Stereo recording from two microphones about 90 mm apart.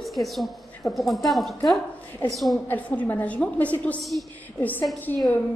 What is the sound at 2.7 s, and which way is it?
A woman's voice, 20° left (ahead or behind).